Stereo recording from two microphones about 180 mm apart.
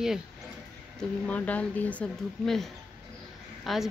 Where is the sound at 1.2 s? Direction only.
10° left (ahead or behind).